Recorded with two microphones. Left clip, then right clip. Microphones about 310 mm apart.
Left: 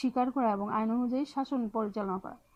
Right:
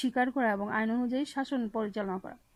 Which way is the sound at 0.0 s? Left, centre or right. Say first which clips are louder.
Right 1 dB; right.